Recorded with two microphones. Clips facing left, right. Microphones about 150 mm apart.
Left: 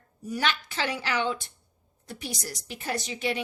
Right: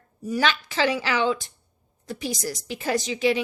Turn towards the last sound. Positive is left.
turn(degrees=-90)